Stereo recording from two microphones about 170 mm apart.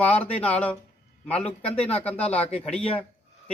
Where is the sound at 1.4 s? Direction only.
35° left (ahead or behind).